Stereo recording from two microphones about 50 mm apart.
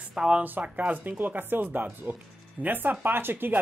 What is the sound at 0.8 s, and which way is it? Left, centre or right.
Speech, right.